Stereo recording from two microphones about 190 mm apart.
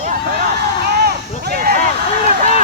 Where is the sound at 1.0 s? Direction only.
55° right (ahead or behind).